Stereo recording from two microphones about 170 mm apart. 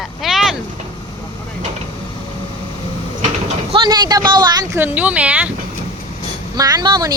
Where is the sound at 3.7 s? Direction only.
25° right (ahead or behind); by 5.5 s 10° right (ahead or behind).